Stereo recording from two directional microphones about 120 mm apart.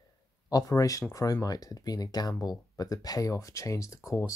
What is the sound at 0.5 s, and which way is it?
Speech, 30° left (ahead or behind).